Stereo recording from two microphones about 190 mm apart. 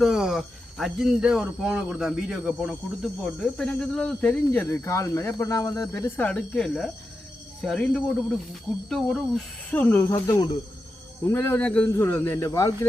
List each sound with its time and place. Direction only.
0.0 s speech: 5° right (ahead or behind); by 12.9 s 15° left (ahead or behind)